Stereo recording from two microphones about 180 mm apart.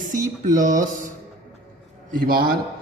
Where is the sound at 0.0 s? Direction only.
45° right (ahead or behind).